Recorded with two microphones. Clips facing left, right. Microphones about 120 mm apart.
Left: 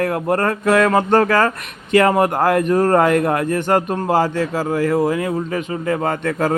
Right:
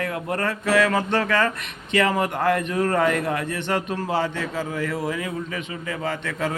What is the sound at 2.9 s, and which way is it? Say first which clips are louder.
Music: left 7 dB; 55° left (ahead or behind).